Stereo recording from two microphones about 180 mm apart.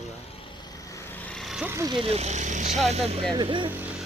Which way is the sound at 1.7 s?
25° right (ahead or behind).